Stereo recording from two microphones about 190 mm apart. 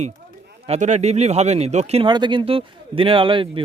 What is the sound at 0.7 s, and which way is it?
Speech, 40° right (ahead or behind).